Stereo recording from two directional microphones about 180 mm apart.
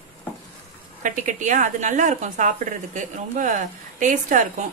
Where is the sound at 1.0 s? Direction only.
45° right (ahead or behind).